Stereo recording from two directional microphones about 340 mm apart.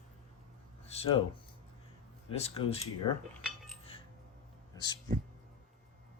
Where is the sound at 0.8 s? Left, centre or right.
Centre.